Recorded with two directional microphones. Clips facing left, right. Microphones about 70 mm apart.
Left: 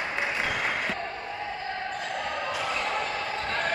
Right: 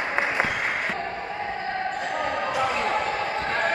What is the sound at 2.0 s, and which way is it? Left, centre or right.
Basketball bounce, right.